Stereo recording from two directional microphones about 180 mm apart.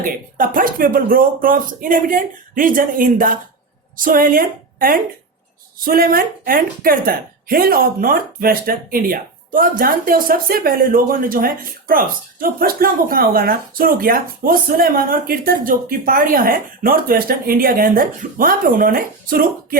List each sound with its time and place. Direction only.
0.0 s a woman's voice: 50° right (ahead or behind)